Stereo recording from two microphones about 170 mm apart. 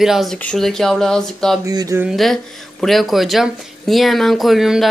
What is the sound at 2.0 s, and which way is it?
Speech, centre (ahead or behind).